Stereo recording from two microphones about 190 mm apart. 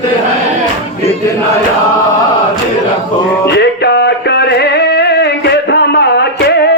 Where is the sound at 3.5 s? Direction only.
60° left (ahead or behind).